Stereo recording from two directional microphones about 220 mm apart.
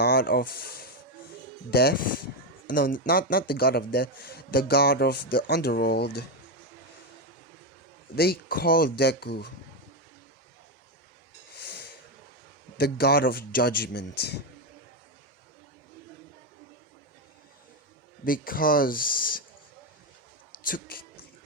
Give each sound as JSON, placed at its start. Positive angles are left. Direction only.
{"t": 0.0, "sound": "a man's voice", "side_deg": 45}
{"t": 8.1, "sound": "a man's voice", "side_deg": 45}
{"t": 11.5, "sound": "snort", "side_deg": 45}
{"t": 12.7, "sound": "a man's voice", "side_deg": 45}
{"t": 18.3, "sound": "speech", "side_deg": 40}
{"t": 20.6, "sound": "speech", "side_deg": 40}